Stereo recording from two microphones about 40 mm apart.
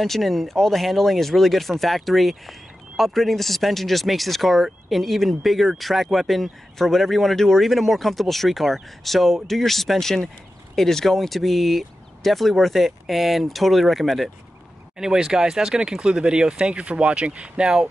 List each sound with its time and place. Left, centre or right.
0.0 s speech: centre
15.0 s speech: centre